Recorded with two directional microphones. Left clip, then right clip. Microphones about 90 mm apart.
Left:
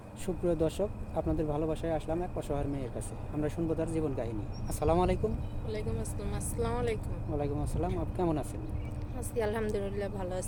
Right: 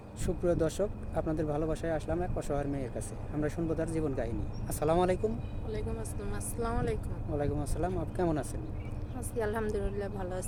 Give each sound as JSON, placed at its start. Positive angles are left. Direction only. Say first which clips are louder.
{"t": 0.4, "sound": "speech", "louder": "even", "side_deg": -10}
{"t": 5.6, "sound": "speech", "louder": "left 1 dB", "side_deg": -35}
{"t": 7.3, "sound": "speech", "louder": "right 1 dB", "side_deg": -5}
{"t": 9.3, "sound": "a woman's voice", "louder": "left 1 dB", "side_deg": -30}